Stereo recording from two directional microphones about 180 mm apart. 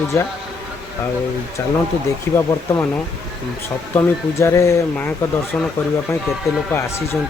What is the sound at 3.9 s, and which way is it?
Speech, 15° left (ahead or behind).